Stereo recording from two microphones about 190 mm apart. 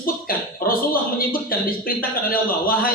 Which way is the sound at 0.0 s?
50° left (ahead or behind).